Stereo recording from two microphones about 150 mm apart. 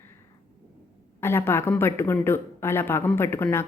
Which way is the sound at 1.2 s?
15° left (ahead or behind).